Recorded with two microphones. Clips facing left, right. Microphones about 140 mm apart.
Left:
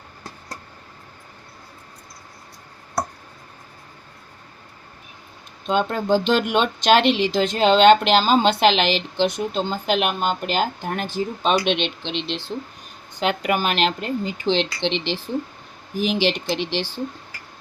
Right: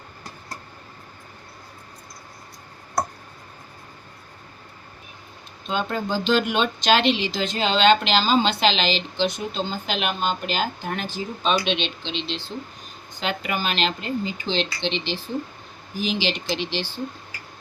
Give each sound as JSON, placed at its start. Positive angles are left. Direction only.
{"t": 5.6, "sound": "speech", "side_deg": 60}
{"t": 16.0, "sound": "speech", "side_deg": 55}